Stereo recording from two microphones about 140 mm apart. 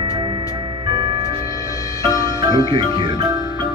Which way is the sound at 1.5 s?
25° left (ahead or behind).